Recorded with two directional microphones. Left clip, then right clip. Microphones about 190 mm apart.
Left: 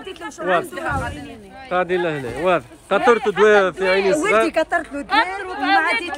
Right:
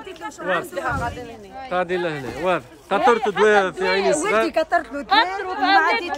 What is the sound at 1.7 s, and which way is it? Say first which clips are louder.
Speech: left 3 dB; 10° right (ahead or behind).